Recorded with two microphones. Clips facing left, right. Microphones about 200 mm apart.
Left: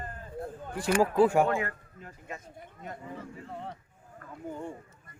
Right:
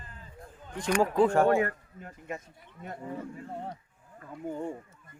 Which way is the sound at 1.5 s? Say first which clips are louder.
Right 5 dB; 40° right (ahead or behind).